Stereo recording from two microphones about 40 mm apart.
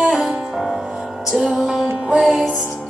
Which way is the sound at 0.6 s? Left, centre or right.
Centre.